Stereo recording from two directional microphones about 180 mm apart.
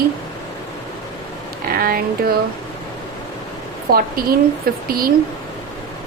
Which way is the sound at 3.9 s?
55° right (ahead or behind).